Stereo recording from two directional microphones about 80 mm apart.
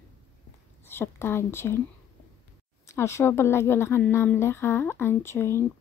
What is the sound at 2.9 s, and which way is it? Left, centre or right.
Speech, left.